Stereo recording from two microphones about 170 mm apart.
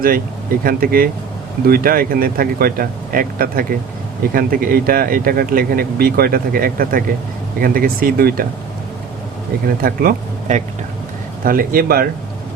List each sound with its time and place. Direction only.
0.6 s speech: 60° right (ahead or behind)
9.6 s speech: 60° right (ahead or behind)
11.4 s speech: 60° right (ahead or behind)